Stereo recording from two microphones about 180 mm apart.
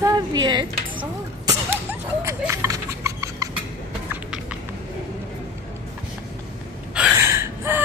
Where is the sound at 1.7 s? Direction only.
15° right (ahead or behind).